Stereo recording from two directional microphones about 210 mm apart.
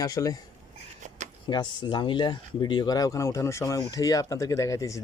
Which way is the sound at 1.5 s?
20° left (ahead or behind).